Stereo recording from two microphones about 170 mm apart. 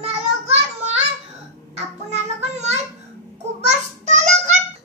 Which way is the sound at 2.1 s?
40° right (ahead or behind).